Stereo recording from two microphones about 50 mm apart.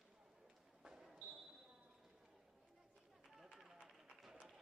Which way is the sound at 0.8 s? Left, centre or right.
Centre.